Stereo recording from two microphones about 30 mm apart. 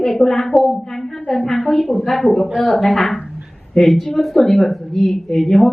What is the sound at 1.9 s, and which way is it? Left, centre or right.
Speech, right.